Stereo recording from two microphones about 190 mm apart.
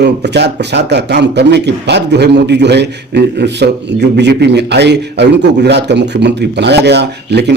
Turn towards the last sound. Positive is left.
turn(degrees=-65)  # may be behind; listen again after turning